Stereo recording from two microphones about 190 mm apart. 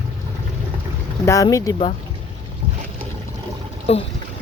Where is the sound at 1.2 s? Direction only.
15° left (ahead or behind).